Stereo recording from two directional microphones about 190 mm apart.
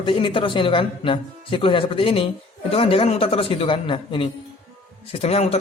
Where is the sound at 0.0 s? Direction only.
25° left (ahead or behind).